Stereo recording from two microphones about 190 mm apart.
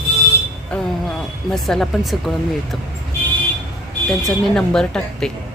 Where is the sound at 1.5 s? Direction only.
Centre (ahead or behind).